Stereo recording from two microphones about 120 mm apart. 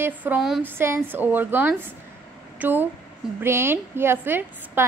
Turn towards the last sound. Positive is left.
turn(degrees=-15)  # may be behind; listen again after turning